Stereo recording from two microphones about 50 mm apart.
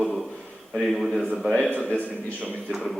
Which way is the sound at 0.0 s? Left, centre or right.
Centre.